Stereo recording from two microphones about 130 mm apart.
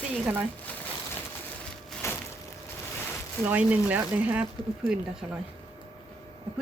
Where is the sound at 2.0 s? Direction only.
20° left (ahead or behind).